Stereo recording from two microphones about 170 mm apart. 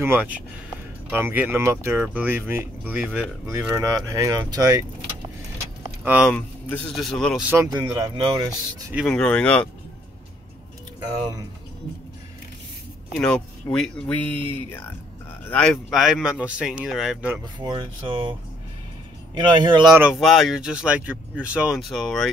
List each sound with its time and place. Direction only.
0.0 s speech: 10° right (ahead or behind)
6.0 s speech: 5° right (ahead or behind)
6.3 s speech: 5° left (ahead or behind)
7.4 s speech: 15° right (ahead or behind)
8.9 s speech: 5° left (ahead or behind)
11.0 s speech: 20° right (ahead or behind)
13.2 s speech: 5° left (ahead or behind)
17.6 s speech: 25° right (ahead or behind)
19.9 s speech: 5° right (ahead or behind)